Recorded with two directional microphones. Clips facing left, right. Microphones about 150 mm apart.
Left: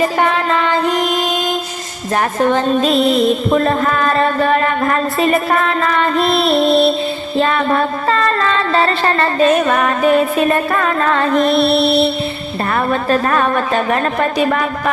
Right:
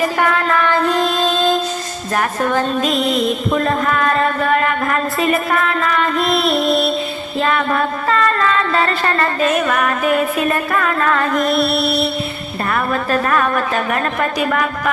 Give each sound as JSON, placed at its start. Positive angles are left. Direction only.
{"t": 0.2, "sound": "child singing", "side_deg": 20}
{"t": 2.1, "sound": "music", "side_deg": 25}